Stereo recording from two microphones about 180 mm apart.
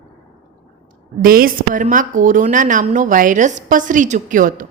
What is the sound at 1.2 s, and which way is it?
A woman's voice, 55° right (ahead or behind).